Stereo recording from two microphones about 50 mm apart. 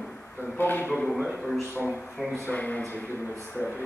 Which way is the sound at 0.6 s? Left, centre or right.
Left.